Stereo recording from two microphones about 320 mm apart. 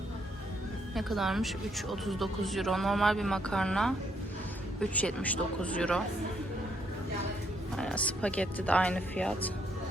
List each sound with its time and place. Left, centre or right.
0.9 s speech: centre
7.8 s speech: centre